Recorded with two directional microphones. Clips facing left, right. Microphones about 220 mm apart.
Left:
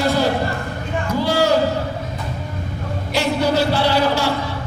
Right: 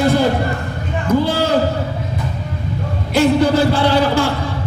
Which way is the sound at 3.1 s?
50° right (ahead or behind).